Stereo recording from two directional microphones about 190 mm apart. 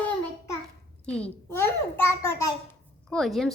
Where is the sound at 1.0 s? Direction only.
5° left (ahead or behind).